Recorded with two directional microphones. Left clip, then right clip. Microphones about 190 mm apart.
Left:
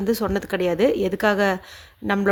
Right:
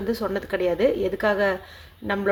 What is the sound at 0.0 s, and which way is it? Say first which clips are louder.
A woman's voice: left 3 dB; 45° left (ahead or behind).